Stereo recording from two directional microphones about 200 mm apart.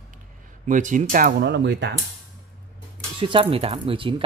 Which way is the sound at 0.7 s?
40° right (ahead or behind).